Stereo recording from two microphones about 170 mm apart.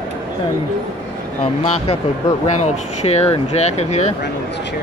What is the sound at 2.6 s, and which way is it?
Speech, 40° left (ahead or behind).